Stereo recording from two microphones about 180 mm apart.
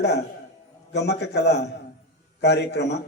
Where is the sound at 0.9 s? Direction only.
70° left (ahead or behind).